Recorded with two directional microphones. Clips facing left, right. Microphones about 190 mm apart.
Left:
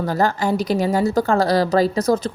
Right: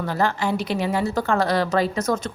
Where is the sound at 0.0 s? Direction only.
40° left (ahead or behind).